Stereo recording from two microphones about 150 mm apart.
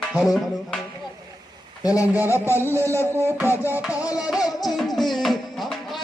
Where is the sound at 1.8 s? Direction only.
20° left (ahead or behind).